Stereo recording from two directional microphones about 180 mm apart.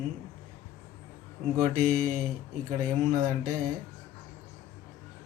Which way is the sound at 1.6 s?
45° right (ahead or behind).